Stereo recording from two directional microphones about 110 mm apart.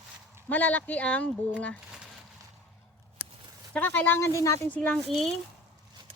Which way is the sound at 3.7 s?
15° left (ahead or behind).